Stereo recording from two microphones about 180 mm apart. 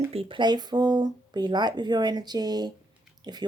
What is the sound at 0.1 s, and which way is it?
Speech, 30° right (ahead or behind).